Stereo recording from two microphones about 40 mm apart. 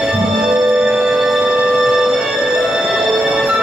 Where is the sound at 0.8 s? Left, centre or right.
Right.